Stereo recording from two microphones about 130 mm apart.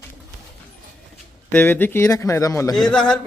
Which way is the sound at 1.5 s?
15° left (ahead or behind).